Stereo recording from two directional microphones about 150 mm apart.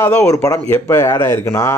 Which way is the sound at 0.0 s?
20° left (ahead or behind).